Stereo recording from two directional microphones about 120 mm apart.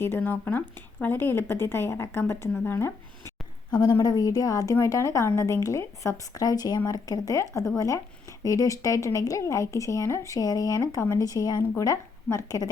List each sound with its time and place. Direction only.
0.0 s speech: 15° left (ahead or behind)
3.7 s speech: 35° left (ahead or behind)